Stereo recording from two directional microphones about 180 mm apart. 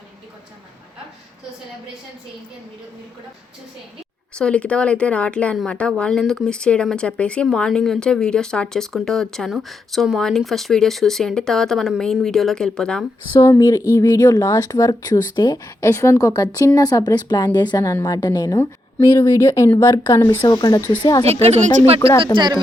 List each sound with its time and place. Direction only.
4.4 s speech: 5° left (ahead or behind)
13.4 s speech: 15° left (ahead or behind)
20.4 s speech: 25° left (ahead or behind)
21.4 s speech: 40° right (ahead or behind)
22.2 s speech: 25° right (ahead or behind)